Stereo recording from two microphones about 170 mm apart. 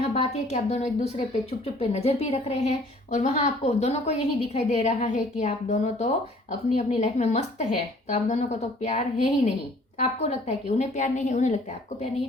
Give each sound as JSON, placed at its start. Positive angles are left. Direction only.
{"t": 0.1, "sound": "a woman's voice", "side_deg": 40}